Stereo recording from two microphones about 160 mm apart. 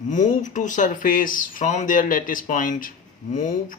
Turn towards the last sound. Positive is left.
turn(degrees=55)  # may be behind; listen again after turning